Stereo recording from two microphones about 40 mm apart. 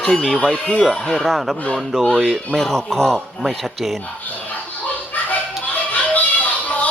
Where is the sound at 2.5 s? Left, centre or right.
Centre.